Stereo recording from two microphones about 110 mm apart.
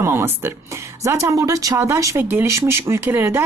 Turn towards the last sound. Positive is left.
turn(degrees=-20)  # may be behind; listen again after turning